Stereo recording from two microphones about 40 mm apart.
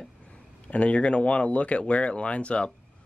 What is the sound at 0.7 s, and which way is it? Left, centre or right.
Speech, left.